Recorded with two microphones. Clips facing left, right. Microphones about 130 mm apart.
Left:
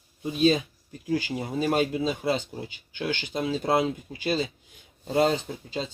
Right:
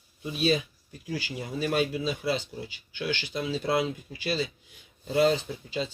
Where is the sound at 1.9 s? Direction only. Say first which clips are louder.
Left 3 dB; 30° left (ahead or behind).